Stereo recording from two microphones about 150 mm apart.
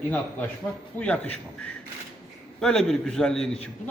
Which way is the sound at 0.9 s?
10° left (ahead or behind).